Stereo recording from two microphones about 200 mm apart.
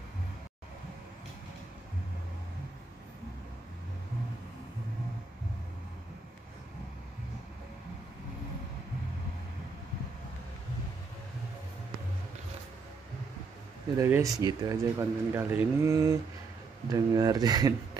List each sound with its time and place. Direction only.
13.9 s speech: 15° right (ahead or behind)